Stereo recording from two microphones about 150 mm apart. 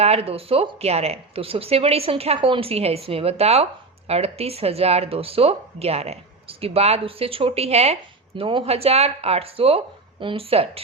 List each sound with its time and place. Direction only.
0.0 s speech: 40° right (ahead or behind)